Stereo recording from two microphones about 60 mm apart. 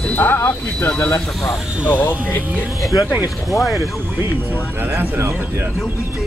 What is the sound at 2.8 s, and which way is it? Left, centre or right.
Speech, left.